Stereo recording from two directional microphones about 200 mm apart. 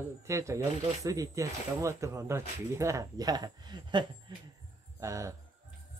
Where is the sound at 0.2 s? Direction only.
15° right (ahead or behind).